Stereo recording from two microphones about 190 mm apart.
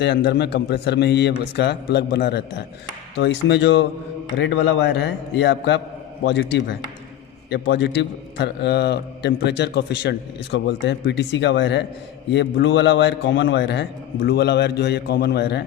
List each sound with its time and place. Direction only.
0.0 s a man's voice: 60° left (ahead or behind)